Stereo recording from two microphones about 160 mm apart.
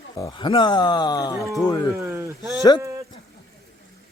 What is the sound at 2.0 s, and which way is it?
Speech, 15° right (ahead or behind).